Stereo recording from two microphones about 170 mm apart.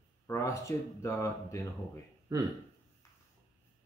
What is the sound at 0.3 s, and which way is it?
Speech, 15° left (ahead or behind).